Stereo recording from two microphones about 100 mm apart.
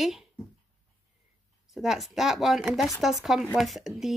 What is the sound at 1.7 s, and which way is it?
Speech, centre (ahead or behind).